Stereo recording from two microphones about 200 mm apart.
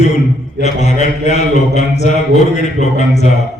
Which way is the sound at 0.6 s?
35° left (ahead or behind).